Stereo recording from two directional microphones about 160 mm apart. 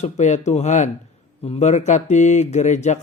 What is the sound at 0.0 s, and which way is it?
A man's voice, 45° left (ahead or behind).